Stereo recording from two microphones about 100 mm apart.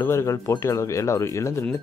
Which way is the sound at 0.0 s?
25° left (ahead or behind).